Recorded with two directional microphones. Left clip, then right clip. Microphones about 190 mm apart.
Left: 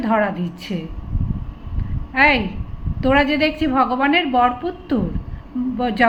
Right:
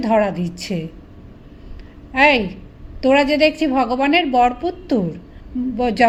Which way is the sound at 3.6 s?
35° right (ahead or behind).